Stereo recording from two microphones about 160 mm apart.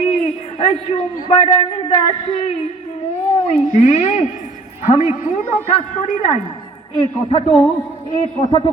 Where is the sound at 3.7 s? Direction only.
45° left (ahead or behind).